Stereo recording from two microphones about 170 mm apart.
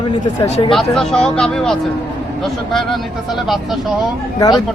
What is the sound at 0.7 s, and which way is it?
Speech, centre (ahead or behind).